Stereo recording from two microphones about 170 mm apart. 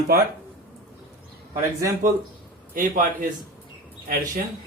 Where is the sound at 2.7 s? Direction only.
55° right (ahead or behind).